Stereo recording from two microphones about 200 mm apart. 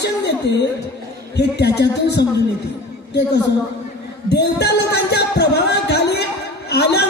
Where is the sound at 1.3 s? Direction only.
55° left (ahead or behind).